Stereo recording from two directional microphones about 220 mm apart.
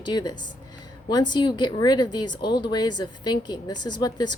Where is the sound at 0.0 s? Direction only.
20° left (ahead or behind).